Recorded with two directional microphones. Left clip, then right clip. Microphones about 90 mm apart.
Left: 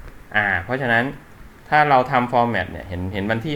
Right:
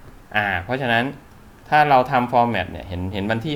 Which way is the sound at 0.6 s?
15° right (ahead or behind).